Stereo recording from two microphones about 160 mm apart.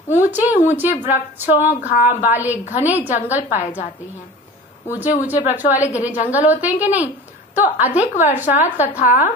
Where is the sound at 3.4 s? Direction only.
50° left (ahead or behind).